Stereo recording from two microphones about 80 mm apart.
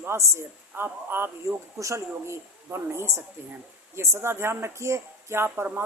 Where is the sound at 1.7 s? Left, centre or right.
Right.